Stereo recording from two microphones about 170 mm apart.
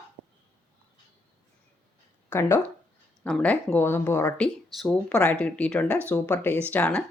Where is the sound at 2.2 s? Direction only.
15° left (ahead or behind).